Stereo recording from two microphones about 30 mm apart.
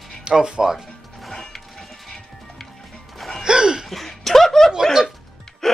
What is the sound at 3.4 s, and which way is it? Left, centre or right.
Hiccup, right.